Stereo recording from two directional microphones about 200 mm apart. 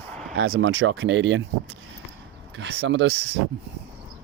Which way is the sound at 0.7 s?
85° right.